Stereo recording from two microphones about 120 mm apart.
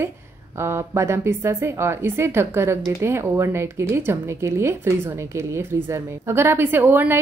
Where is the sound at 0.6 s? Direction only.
20° right (ahead or behind).